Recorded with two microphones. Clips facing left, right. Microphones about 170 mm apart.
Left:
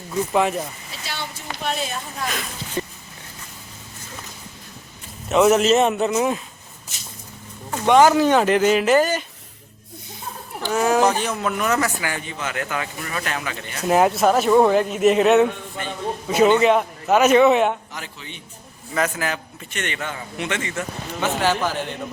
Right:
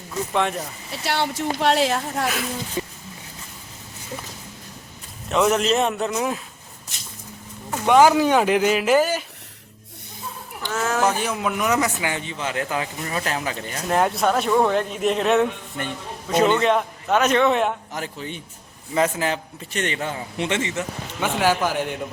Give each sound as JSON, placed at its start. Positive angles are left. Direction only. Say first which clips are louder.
{"t": 0.3, "sound": "speech", "louder": "left 3 dB", "side_deg": 5}
{"t": 0.9, "sound": "speech", "louder": "right 8 dB", "side_deg": -70}
{"t": 2.3, "sound": "speech", "louder": "right 1 dB", "side_deg": -5}
{"t": 5.3, "sound": "speech", "louder": "left 4 dB", "side_deg": 5}
{"t": 7.7, "sound": "speech", "louder": "left 1 dB", "side_deg": -5}
{"t": 10.7, "sound": "a man's voice", "louder": "left 5 dB", "side_deg": 15}
{"t": 11.0, "sound": "a man's voice", "louder": "left 2 dB", "side_deg": -10}
{"t": 13.8, "sound": "a man's voice", "louder": "left 4 dB", "side_deg": 5}
{"t": 17.9, "sound": "a man's voice", "louder": "right 6 dB", "side_deg": -45}
{"t": 18.9, "sound": "a man's voice", "louder": "right 2 dB", "side_deg": -25}
{"t": 21.2, "sound": "speech", "louder": "right 1 dB", "side_deg": -10}